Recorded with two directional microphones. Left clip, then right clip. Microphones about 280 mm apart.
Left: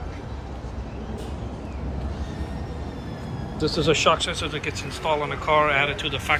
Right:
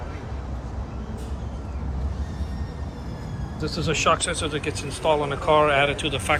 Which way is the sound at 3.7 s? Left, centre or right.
Centre.